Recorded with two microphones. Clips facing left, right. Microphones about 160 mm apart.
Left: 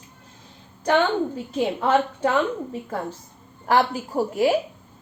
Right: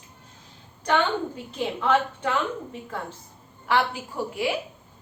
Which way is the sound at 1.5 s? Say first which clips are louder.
Left 3 dB; 40° left (ahead or behind).